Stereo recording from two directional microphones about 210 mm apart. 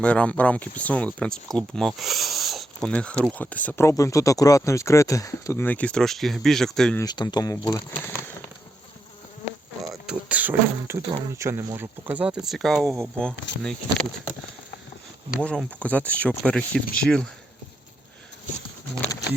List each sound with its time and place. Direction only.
0.0 s speech: 5° left (ahead or behind)
7.0 s speech: 20° left (ahead or behind)
9.9 s beatboxing: 5° right (ahead or behind)
11.1 s speech: 15° right (ahead or behind); by 13.3 s 5° left (ahead or behind)
13.3 s speech: 60° left (ahead or behind)
15.4 s speech: 5° left (ahead or behind)